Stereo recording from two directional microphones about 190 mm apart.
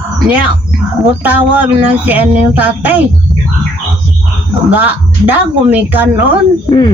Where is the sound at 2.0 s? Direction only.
10° right (ahead or behind).